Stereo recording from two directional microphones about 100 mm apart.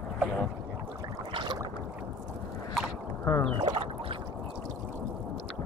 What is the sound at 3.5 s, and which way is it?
Rowboat, 50° right (ahead or behind).